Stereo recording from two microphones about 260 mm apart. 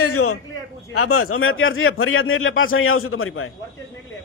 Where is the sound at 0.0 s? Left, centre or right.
Left.